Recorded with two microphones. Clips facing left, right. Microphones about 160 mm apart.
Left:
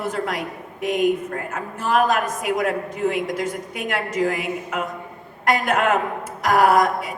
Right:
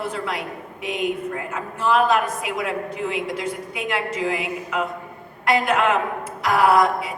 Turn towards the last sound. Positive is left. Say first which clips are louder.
# even
turn(degrees=45)  # may be behind; listen again after turning